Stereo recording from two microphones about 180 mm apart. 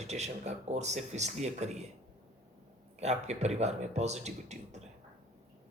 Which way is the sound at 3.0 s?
40° right (ahead or behind).